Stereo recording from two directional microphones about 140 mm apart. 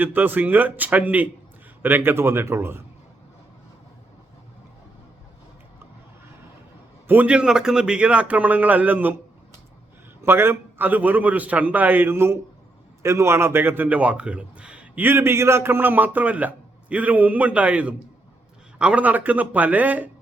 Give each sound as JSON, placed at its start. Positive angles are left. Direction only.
{"t": 0.0, "sound": "a man's voice", "side_deg": -15}
{"t": 7.1, "sound": "a man's voice", "side_deg": -10}
{"t": 10.2, "sound": "a man's voice", "side_deg": -15}